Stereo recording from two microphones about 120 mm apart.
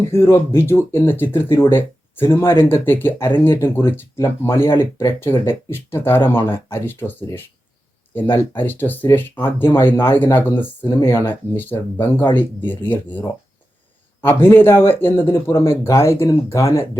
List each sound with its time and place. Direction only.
0.1 s speech: 20° left (ahead or behind)